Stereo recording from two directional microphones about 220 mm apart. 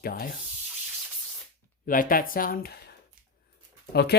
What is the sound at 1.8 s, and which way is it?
Speech, 40° left (ahead or behind).